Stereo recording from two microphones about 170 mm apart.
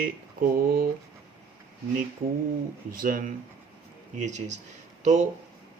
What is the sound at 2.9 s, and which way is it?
Speech, 55° right (ahead or behind).